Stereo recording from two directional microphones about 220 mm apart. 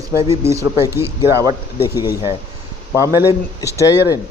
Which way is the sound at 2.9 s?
10° right (ahead or behind).